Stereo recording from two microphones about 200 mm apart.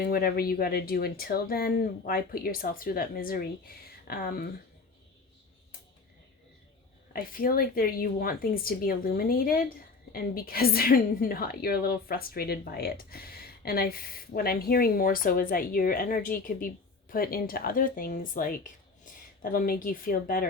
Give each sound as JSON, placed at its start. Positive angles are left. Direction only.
{"t": 0.0, "sound": "speech", "side_deg": 50}
{"t": 7.1, "sound": "speech", "side_deg": 45}